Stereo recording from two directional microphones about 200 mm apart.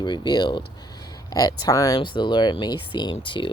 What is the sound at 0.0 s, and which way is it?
Speech, 25° left (ahead or behind).